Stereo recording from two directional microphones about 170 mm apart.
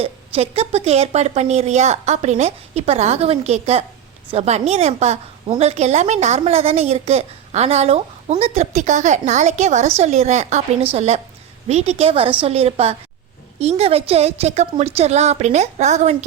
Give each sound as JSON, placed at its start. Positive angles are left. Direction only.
{"t": 0.0, "sound": "a woman's voice", "side_deg": -35}